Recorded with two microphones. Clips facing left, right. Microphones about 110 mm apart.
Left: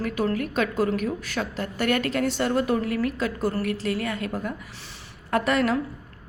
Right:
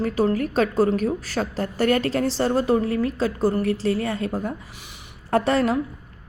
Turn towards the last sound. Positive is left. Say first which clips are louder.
# right 3 dB
turn(degrees=-30)  # may be behind; listen again after turning